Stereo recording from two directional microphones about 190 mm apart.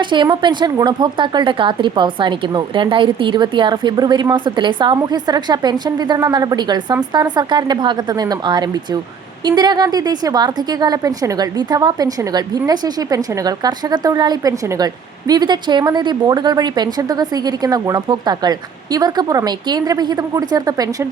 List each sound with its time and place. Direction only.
0.0 s a woman's voice: 25° right (ahead or behind)